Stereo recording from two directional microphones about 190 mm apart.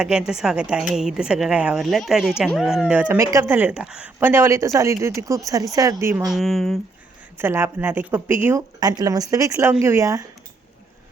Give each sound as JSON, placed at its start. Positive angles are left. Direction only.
{"t": 0.0, "sound": "a woman's voice", "side_deg": -5}
{"t": 6.2, "sound": "a woman's voice", "side_deg": 0}
{"t": 7.3, "sound": "speech", "side_deg": -10}